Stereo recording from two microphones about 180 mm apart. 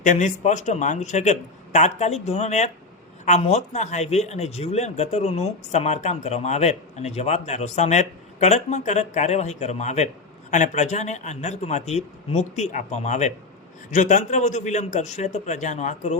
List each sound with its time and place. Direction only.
0.0 s speech: 45° left (ahead or behind)